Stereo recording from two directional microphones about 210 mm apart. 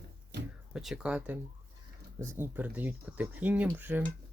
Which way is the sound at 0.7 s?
5° right (ahead or behind).